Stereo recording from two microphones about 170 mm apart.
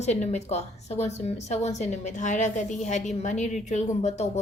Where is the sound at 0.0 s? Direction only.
40° left (ahead or behind).